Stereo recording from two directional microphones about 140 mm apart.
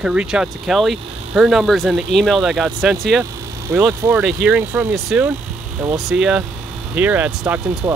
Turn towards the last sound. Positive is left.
turn(degrees=-5)  # may be behind; listen again after turning